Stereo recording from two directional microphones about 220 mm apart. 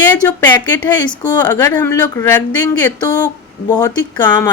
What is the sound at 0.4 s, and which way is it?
Speech, 20° left (ahead or behind).